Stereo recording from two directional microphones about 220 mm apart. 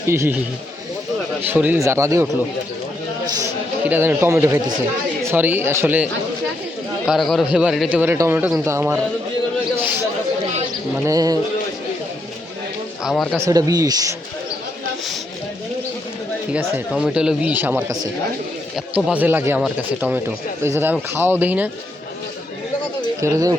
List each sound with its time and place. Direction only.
0.1 s a man's voice: 10° right (ahead or behind)
1.4 s a man's voice: 10° right (ahead or behind)
3.8 s a man's voice: 10° right (ahead or behind)
7.1 s a man's voice: centre (ahead or behind)
10.9 s a man's voice: 15° right (ahead or behind)
13.1 s speech: centre (ahead or behind)
13.4 s a man's voice: 15° right (ahead or behind)
16.5 s a man's voice: 5° right (ahead or behind)
23.2 s a man's voice: 15° right (ahead or behind)